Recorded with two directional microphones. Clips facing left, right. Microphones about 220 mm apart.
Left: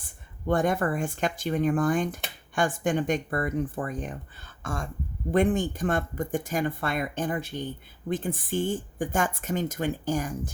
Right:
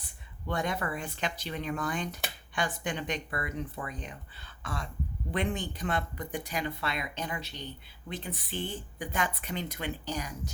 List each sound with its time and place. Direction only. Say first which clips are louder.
0.0 s speech: left 9 dB; 50° left (ahead or behind)